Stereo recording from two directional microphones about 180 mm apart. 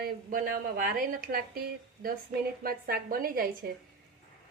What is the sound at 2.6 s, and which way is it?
A woman's voice, 55° right (ahead or behind).